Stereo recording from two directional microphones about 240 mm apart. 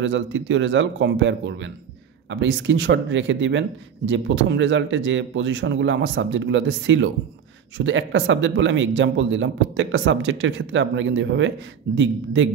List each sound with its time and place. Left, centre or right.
0.0 s a man's voice: right